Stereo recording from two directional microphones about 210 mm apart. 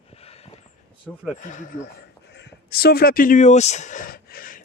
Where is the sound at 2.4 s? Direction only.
45° left (ahead or behind).